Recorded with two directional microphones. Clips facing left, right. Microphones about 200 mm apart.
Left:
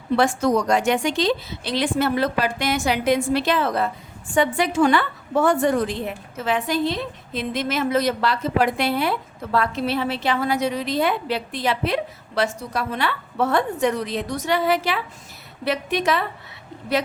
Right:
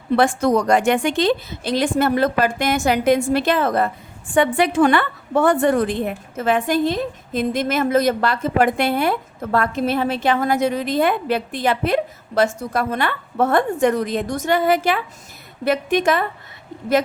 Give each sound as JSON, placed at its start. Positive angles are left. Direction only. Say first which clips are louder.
{"t": 0.2, "sound": "a woman's voice", "louder": "right 2 dB", "side_deg": -55}